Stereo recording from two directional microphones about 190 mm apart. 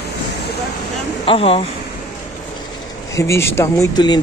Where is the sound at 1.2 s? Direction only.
30° left (ahead or behind).